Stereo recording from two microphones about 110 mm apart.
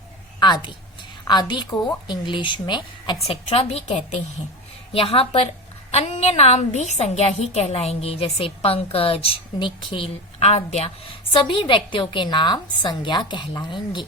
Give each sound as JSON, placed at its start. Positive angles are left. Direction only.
{"t": 0.3, "sound": "a sound", "side_deg": 40}
{"t": 1.3, "sound": "a woman's voice", "side_deg": 40}
{"t": 3.2, "sound": "a woman's voice", "side_deg": 65}
{"t": 5.9, "sound": "a woman's voice", "side_deg": 75}
{"t": 11.3, "sound": "a woman's voice", "side_deg": 50}